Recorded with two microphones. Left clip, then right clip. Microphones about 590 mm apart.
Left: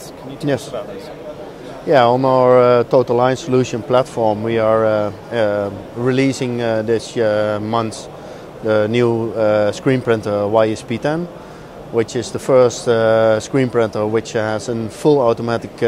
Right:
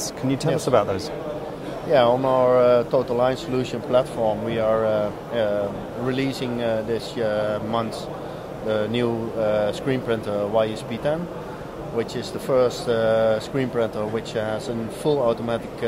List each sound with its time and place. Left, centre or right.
1.9 s speech: left